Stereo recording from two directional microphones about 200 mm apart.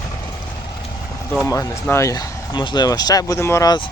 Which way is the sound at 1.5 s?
15° left (ahead or behind).